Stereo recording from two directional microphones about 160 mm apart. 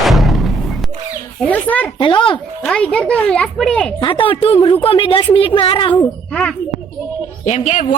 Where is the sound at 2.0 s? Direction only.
30° left (ahead or behind).